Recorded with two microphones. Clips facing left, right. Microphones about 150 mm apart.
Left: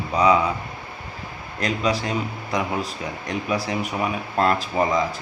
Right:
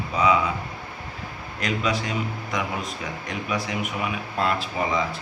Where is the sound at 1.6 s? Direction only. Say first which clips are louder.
Left 3 dB; 35° left (ahead or behind).